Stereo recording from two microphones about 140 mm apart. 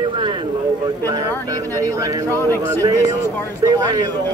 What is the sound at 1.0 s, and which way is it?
Speech, 25° right (ahead or behind).